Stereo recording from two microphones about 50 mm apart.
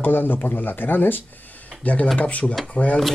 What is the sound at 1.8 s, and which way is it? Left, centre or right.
Speech, left.